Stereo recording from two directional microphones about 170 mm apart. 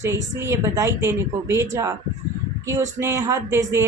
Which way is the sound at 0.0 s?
15° right (ahead or behind).